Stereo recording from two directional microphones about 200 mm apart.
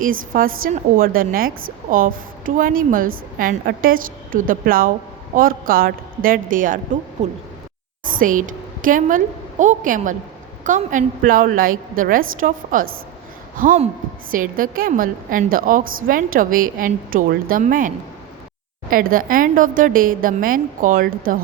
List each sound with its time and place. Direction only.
0.0 s a woman's voice: 45° right (ahead or behind)
8.0 s a woman's voice: 45° right (ahead or behind)